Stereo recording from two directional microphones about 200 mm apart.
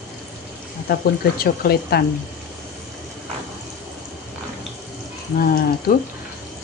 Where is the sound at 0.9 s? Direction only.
50° left (ahead or behind).